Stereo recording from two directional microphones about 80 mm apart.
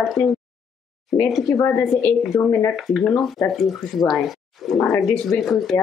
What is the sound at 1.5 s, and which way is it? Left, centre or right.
Speech, left.